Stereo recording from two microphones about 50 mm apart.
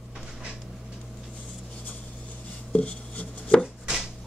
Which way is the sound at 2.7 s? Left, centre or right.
Left.